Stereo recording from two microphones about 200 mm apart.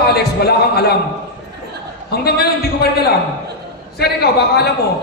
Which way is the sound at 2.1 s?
55° left (ahead or behind).